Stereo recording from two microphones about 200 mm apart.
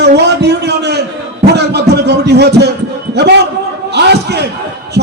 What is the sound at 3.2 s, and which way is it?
A man's voice, 55° right (ahead or behind).